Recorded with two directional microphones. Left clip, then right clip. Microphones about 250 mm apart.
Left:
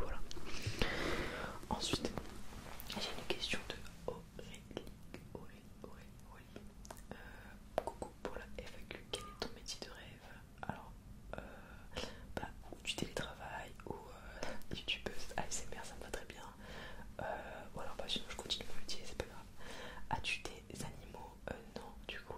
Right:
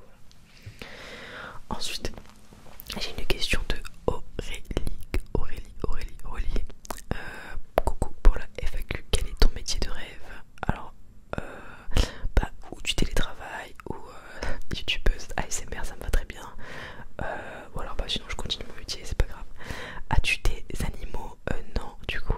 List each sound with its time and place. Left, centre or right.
0.7 s whispering: centre
1.0 s whispering: centre
1.7 s whispering: right
2.9 s whispering: right